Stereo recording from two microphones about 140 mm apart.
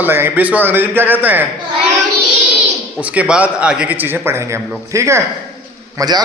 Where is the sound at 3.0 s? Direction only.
10° right (ahead or behind).